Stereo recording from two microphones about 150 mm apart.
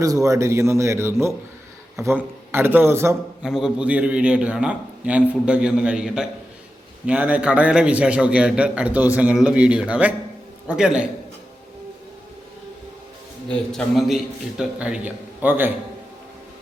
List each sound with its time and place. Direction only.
0.0 s a man's voice: 20° right (ahead or behind)
3.4 s a man's voice: 5° right (ahead or behind)
13.5 s a man's voice: 5° left (ahead or behind)